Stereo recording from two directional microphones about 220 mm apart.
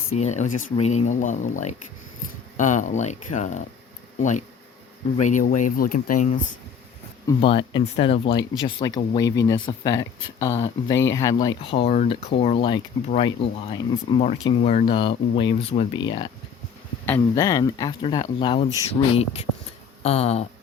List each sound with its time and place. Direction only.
0.1 s speech: 30° left (ahead or behind)
7.3 s speech: 25° left (ahead or behind)